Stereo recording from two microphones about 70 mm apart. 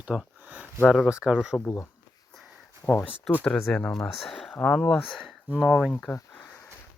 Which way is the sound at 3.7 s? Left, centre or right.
Centre.